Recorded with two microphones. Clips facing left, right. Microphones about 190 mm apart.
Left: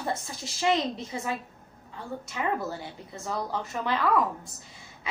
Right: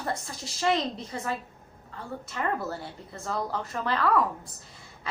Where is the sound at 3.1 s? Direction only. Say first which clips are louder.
Right 1 dB; 20° left (ahead or behind).